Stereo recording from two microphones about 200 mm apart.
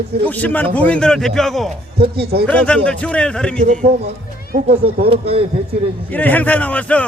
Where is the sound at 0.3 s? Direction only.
10° left (ahead or behind).